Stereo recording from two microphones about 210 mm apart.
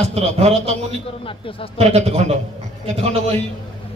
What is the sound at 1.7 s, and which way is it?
Speech, 30° right (ahead or behind).